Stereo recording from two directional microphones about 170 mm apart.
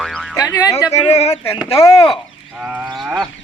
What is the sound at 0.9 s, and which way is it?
Speech, 35° left (ahead or behind).